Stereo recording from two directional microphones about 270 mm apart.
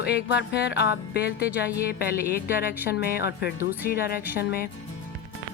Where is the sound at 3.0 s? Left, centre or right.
Left.